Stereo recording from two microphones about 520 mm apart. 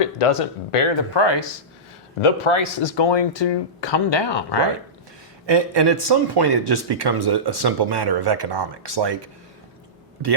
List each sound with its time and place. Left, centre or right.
0.0 s speech: left
1.1 s speech: left
2.2 s speech: left
5.5 s speech: right